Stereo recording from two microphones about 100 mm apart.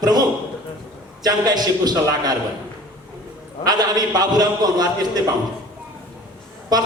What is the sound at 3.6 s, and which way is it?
A man's voice, 40° right (ahead or behind).